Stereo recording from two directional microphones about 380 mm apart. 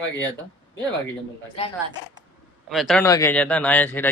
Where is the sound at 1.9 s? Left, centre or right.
Centre.